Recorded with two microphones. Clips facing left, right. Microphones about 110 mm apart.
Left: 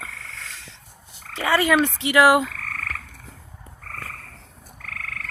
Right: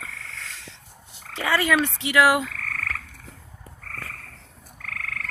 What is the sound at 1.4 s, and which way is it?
Frog, 15° left (ahead or behind).